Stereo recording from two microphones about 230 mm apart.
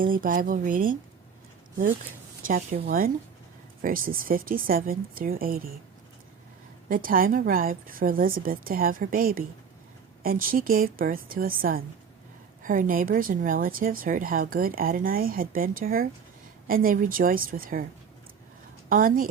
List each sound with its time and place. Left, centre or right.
0.0 s speech: right
2.5 s speech: right
6.8 s speech: right
18.9 s speech: right